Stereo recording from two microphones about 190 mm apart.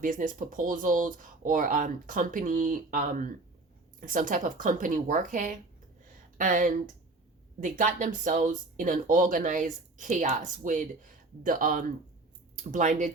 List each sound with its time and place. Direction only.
0.0 s speech: 45° right (ahead or behind)